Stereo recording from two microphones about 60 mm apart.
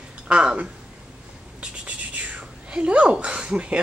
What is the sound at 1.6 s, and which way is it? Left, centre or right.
Whispering, right.